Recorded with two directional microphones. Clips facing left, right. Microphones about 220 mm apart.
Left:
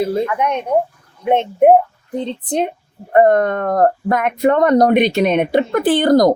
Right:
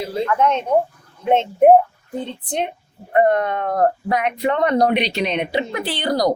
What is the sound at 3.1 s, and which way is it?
Speech, 45° left (ahead or behind).